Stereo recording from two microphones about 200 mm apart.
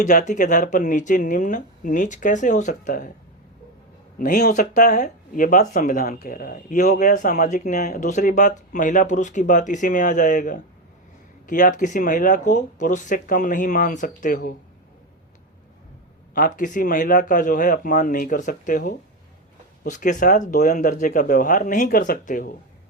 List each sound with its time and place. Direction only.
0.0 s speech: 40° left (ahead or behind)
4.2 s speech: 40° left (ahead or behind)
16.6 s speech: 40° left (ahead or behind)